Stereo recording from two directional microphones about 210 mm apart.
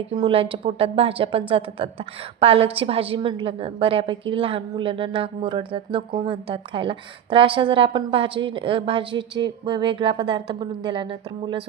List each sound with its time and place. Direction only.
0.2 s a woman's voice: 25° right (ahead or behind)